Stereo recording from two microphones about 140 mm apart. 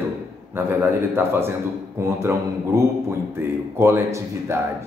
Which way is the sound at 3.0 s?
15° right (ahead or behind).